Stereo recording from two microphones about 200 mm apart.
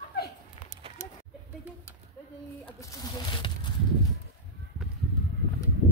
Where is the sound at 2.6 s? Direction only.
20° left (ahead or behind).